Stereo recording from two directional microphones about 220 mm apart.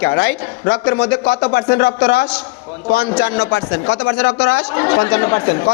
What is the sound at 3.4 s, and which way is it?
Speech, 70° left (ahead or behind).